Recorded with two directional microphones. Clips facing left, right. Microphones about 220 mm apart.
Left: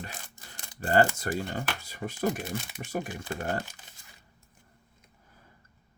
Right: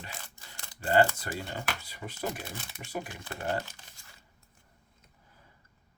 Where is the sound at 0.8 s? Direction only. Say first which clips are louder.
Left 1 dB; 45° left (ahead or behind).